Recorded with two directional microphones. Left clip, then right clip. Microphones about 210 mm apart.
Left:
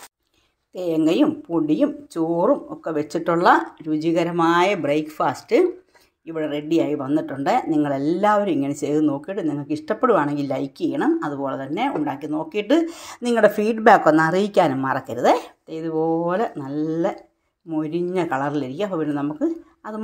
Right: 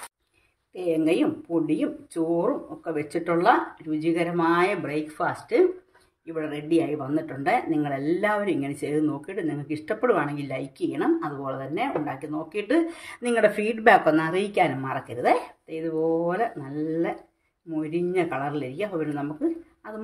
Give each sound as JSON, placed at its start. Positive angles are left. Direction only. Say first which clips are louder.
{"t": 0.7, "sound": "a woman's voice", "louder": "left 4 dB", "side_deg": 30}